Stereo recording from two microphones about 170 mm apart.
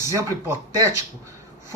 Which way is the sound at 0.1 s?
15° right (ahead or behind).